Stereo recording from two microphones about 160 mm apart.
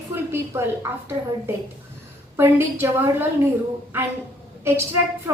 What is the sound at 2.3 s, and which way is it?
Speech, 15° right (ahead or behind).